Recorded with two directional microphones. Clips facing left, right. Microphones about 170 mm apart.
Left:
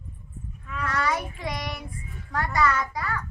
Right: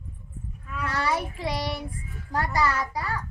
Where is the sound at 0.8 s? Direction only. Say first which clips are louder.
Even; 30° right (ahead or behind).